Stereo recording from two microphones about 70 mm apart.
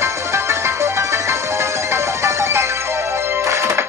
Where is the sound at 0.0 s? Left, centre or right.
Right.